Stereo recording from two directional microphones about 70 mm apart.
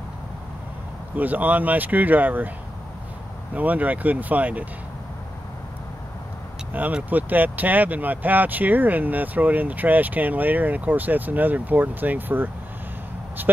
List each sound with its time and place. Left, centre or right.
1.1 s speech: right
3.5 s speech: right
6.7 s speech: right